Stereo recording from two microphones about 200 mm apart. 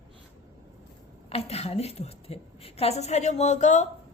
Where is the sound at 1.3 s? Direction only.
30° left (ahead or behind).